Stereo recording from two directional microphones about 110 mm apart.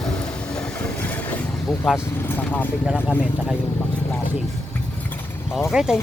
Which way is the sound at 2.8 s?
5° right (ahead or behind).